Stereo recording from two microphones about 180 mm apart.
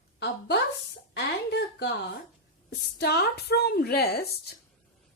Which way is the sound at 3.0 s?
65° left (ahead or behind).